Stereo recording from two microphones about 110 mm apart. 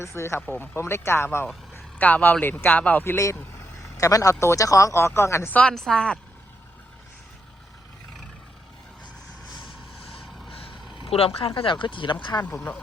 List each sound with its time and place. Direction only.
0.0 s speech: 25° left (ahead or behind)
5.5 s speech: 5° left (ahead or behind)
10.9 s speech: 60° left (ahead or behind)